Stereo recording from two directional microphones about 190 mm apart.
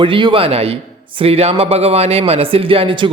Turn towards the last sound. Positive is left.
turn(degrees=-25)  # may be behind; listen again after turning